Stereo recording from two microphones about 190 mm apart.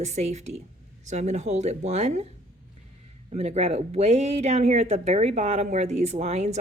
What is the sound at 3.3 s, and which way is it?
Speech, 35° right (ahead or behind).